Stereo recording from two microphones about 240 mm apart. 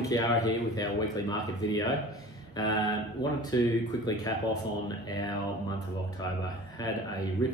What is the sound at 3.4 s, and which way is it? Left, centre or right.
Speech, centre.